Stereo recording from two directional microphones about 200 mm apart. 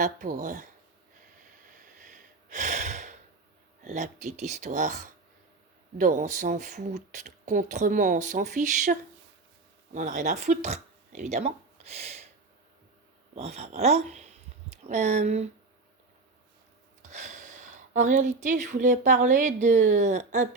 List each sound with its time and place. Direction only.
0.0 s speech: 40° right (ahead or behind)
1.6 s a sound: 40° right (ahead or behind)
3.8 s speech: 35° right (ahead or behind)
13.3 s speech: 30° right (ahead or behind)
17.1 s speech: 40° right (ahead or behind)